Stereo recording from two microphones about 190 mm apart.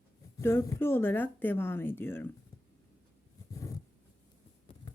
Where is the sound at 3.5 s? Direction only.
15° left (ahead or behind).